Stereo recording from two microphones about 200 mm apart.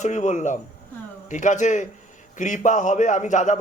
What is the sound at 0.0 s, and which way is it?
A man's voice, 35° left (ahead or behind).